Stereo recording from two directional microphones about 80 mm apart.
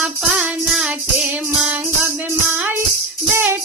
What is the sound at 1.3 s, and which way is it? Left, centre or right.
Music, centre.